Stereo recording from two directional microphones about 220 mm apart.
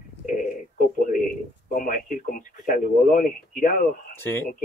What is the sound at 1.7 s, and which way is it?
Speech, 40° left (ahead or behind).